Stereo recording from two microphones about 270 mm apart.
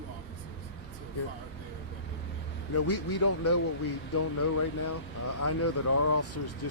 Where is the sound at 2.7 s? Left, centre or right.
Left.